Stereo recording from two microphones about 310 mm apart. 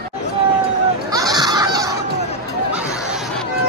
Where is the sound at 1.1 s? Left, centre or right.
Centre.